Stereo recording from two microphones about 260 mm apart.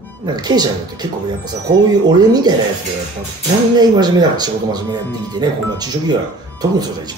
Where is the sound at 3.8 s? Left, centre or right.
Centre.